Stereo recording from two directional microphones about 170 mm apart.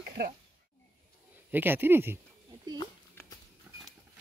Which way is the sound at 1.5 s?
10° right (ahead or behind).